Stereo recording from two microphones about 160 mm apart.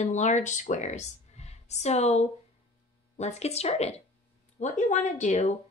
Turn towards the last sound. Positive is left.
turn(degrees=45)  # may be behind; listen again after turning